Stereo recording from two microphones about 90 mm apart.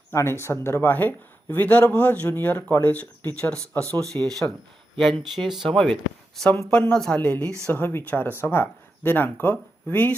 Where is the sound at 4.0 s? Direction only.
5° left (ahead or behind).